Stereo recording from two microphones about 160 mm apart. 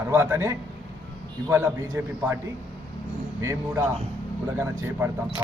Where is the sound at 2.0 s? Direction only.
10° right (ahead or behind).